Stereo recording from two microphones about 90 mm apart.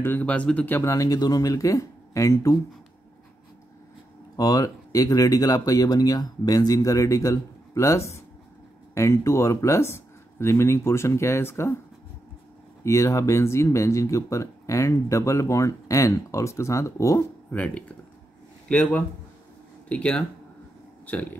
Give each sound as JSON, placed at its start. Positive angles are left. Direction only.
{"t": 0.0, "sound": "speech", "side_deg": 20}
{"t": 0.7, "sound": "speech", "side_deg": 35}
{"t": 4.4, "sound": "speech", "side_deg": 45}
{"t": 12.8, "sound": "speech", "side_deg": 35}
{"t": 17.5, "sound": "speech", "side_deg": 15}